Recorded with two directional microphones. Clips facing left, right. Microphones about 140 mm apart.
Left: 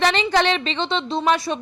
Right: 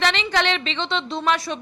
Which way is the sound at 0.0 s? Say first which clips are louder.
Left 3 dB; 40° left (ahead or behind).